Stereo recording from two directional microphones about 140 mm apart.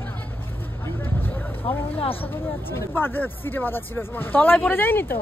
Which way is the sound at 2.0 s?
40° left (ahead or behind).